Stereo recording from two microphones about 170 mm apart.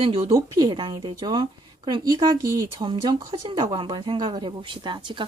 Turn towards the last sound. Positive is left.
turn(degrees=-30)  # may be behind; listen again after turning